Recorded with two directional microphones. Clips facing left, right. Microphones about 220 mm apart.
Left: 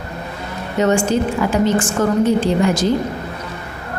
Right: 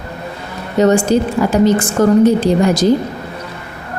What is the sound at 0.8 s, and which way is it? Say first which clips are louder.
A woman's voice: right 4 dB; 35° right (ahead or behind).